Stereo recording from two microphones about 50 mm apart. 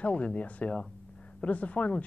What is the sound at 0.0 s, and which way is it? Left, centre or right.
Speech, left.